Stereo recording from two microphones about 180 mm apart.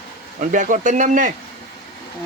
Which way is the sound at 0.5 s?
45° right (ahead or behind).